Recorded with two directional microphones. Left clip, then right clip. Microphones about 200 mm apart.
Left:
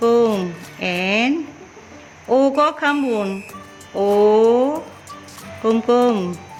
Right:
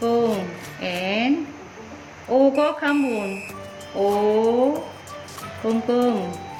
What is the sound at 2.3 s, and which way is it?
Speech, 55° left (ahead or behind).